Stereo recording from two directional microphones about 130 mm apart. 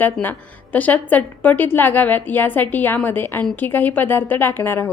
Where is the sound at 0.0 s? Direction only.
15° left (ahead or behind).